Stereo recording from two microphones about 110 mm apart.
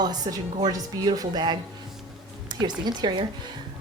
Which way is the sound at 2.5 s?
40° right (ahead or behind).